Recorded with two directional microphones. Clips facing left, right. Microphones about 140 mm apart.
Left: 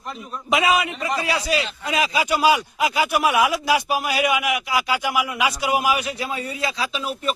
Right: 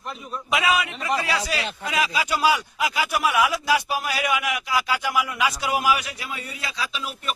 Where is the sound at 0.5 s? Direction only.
25° left (ahead or behind).